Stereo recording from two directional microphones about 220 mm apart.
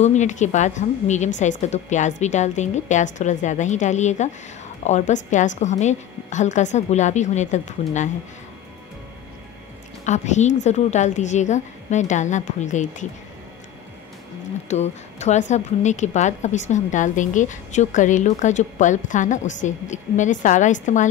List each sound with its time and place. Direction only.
0.0 s a woman's voice: 30° left (ahead or behind)
10.0 s a woman's voice: 30° left (ahead or behind)
14.7 s a woman's voice: 30° left (ahead or behind)